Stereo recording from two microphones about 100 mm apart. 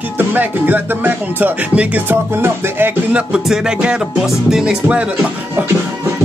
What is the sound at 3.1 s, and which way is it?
Music, 5° right (ahead or behind).